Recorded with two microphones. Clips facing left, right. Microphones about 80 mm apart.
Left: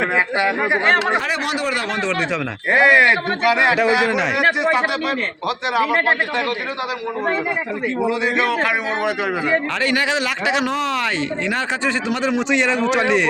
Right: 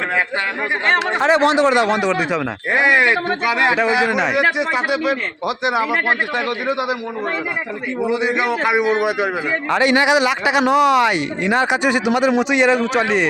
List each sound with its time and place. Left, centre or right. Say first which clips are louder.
1.2 s speech: right 8 dB; right; by 5.1 s centre
5.6 s a man's voice: left 1 dB; centre
8.1 s a man's voice: right 1 dB; centre
9.7 s a man's voice: right 5 dB; centre